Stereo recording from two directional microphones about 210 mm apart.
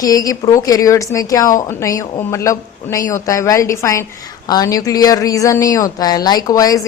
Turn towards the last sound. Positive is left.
turn(degrees=15)  # may be behind; listen again after turning